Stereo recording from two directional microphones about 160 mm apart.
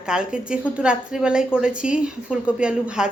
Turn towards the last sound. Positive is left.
turn(degrees=-5)  # may be behind; listen again after turning